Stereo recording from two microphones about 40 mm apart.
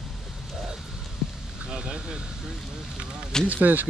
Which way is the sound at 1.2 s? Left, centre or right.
Centre.